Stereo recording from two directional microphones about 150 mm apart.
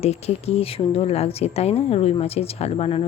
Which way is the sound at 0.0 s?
45° left (ahead or behind).